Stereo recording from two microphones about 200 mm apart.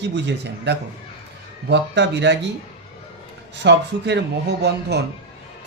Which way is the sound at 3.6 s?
60° right (ahead or behind).